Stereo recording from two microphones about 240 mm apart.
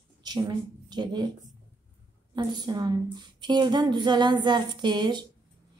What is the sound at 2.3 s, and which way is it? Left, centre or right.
A woman's voice, centre.